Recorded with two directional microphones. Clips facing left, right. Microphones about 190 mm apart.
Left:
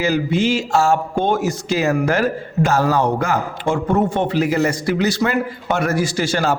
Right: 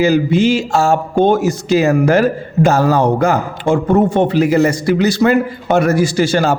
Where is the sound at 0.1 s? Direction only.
20° right (ahead or behind).